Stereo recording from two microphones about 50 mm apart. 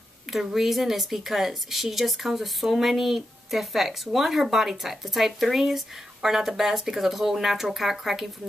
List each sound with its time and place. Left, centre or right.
0.3 s a woman's voice: centre